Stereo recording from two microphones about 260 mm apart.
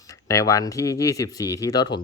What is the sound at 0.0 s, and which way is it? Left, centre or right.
Speech, centre.